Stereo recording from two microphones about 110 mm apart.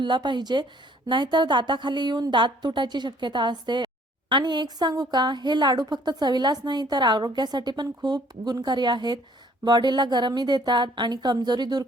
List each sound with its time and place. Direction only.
0.0 s a woman's voice: 45° right (ahead or behind)